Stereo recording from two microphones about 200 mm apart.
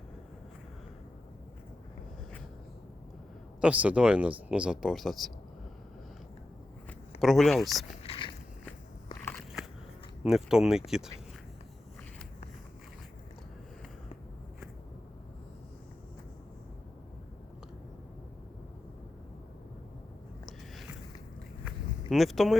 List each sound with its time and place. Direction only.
3.6 s speech: 5° right (ahead or behind)
7.2 s speech: centre (ahead or behind)
8.0 s biting: 30° left (ahead or behind)
10.2 s speech: 5° right (ahead or behind)
22.1 s speech: centre (ahead or behind)